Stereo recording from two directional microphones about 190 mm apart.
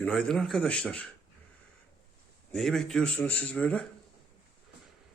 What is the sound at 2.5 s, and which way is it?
A man's voice, centre (ahead or behind).